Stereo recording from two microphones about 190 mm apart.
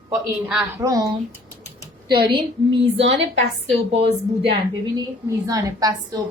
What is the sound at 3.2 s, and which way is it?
Speech, 30° right (ahead or behind).